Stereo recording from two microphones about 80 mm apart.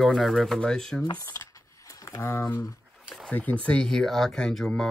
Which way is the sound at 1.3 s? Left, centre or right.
Left.